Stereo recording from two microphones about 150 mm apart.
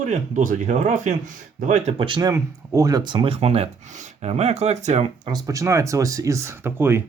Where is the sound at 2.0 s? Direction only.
30° right (ahead or behind); by 5.1 s 50° right (ahead or behind).